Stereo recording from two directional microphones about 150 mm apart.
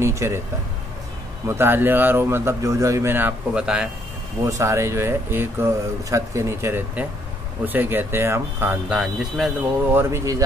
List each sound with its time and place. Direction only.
0.0 s speech: 20° right (ahead or behind)
1.5 s speech: 15° right (ahead or behind)
4.5 s speech: 20° right (ahead or behind)
8.8 s speech: 5° right (ahead or behind)
9.9 s speech: 15° right (ahead or behind)